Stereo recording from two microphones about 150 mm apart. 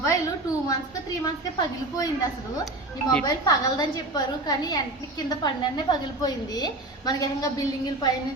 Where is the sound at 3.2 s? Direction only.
25° left (ahead or behind).